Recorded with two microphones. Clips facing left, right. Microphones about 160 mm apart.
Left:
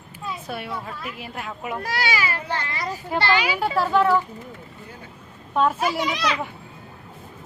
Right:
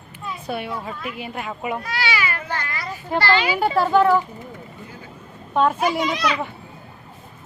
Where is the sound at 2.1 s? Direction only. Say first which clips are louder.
Even; 30° left (ahead or behind).